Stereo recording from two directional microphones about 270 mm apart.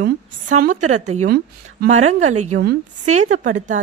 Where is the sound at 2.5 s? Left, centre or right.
Right.